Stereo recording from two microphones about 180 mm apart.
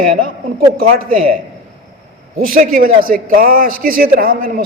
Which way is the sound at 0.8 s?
55° right (ahead or behind).